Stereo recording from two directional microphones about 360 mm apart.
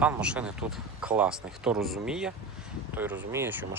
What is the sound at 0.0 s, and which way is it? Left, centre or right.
Speech, centre.